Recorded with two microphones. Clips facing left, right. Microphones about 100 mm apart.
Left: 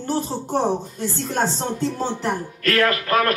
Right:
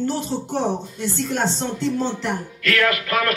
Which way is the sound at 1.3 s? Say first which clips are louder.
Left 3 dB; 40° left (ahead or behind).